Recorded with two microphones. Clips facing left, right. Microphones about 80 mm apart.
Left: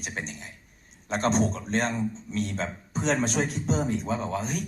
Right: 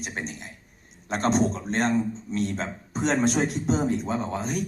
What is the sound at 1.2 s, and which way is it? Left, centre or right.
Speech, centre.